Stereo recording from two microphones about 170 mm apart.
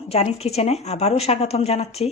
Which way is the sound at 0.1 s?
40° left (ahead or behind).